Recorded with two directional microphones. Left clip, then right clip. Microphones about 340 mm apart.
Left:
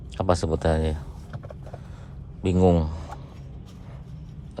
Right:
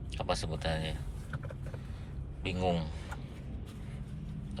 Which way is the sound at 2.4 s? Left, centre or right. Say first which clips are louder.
Left 12 dB; centre.